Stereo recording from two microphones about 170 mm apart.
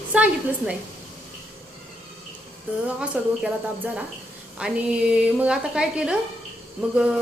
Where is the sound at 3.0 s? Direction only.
5° right (ahead or behind).